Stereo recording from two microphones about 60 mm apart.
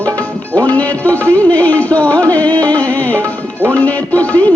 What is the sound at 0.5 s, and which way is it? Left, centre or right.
Music, left.